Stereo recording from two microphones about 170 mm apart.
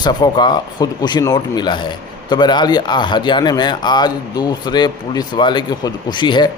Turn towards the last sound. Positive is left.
turn(degrees=25)  # may be behind; listen again after turning